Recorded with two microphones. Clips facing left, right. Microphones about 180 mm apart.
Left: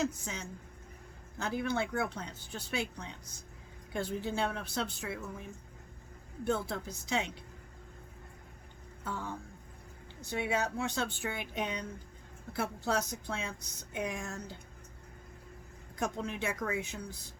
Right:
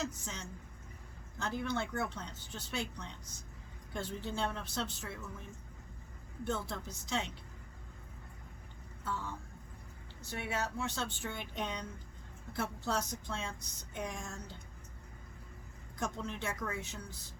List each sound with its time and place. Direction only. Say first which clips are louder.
0.0 s speech: left 6 dB; 10° left (ahead or behind)
9.0 s music: left 1 dB; 55° left (ahead or behind)
10.2 s speech: left 5 dB; 15° left (ahead or behind)
16.2 s speech: left 4 dB; 10° left (ahead or behind)